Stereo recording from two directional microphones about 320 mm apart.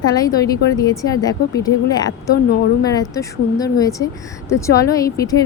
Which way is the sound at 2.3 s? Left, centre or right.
Left.